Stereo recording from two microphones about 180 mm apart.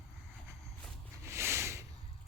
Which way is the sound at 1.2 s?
15° right (ahead or behind).